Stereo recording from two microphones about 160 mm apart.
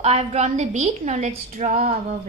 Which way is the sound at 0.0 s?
40° right (ahead or behind).